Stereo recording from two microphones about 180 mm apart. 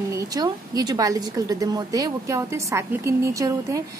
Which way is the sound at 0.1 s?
20° right (ahead or behind).